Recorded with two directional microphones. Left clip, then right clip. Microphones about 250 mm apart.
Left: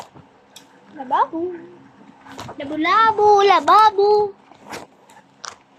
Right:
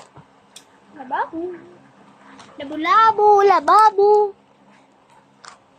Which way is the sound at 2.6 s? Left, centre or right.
Centre.